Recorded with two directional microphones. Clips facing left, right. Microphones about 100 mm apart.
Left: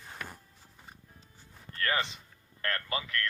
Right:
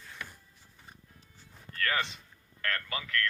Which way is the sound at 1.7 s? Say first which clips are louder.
Even; 20° left (ahead or behind).